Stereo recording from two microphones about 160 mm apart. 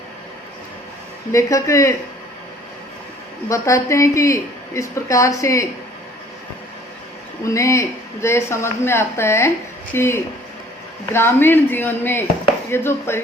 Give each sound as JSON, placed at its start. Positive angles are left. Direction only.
{"t": 1.3, "sound": "a woman's voice", "side_deg": 20}
{"t": 3.5, "sound": "a woman's voice", "side_deg": 20}
{"t": 7.4, "sound": "speech", "side_deg": 20}